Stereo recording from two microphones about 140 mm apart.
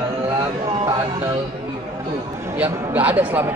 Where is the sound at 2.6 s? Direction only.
10° right (ahead or behind).